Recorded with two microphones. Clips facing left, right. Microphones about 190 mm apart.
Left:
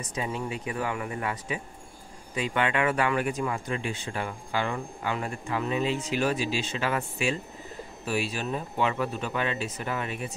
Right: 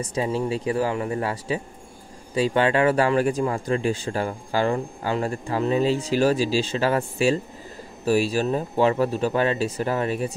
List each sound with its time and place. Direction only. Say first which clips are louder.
0.0 s speech: right 7 dB; 30° right (ahead or behind)